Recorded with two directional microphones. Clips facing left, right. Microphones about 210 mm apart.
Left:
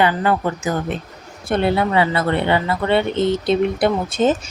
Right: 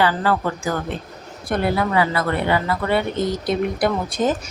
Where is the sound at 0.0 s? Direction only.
20° left (ahead or behind).